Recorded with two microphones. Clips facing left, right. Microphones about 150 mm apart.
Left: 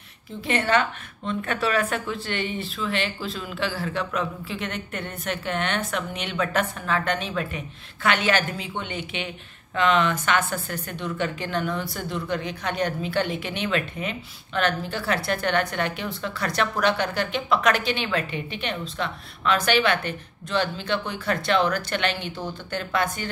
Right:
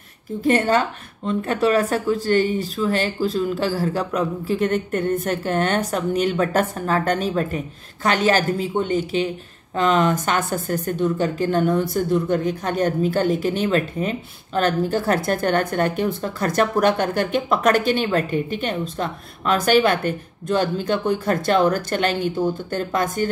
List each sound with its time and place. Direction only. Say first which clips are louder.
0.4 s a woman's voice: right 5 dB; 45° right (ahead or behind)